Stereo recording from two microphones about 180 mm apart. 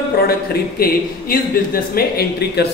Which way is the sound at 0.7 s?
55° left (ahead or behind).